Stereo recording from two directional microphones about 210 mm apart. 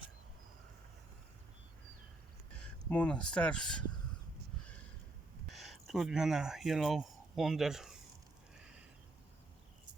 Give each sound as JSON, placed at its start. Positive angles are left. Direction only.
{"t": 2.9, "sound": "speech", "side_deg": 5}
{"t": 5.5, "sound": "speech", "side_deg": 0}